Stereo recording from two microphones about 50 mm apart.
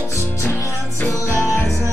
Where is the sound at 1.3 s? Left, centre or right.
Left.